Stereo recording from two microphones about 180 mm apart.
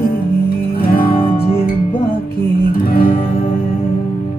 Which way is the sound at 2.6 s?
55° left (ahead or behind).